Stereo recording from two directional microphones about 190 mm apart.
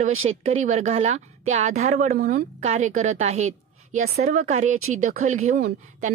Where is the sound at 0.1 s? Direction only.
90° right.